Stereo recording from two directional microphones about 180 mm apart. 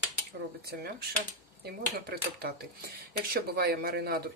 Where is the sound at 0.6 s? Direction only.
60° right (ahead or behind).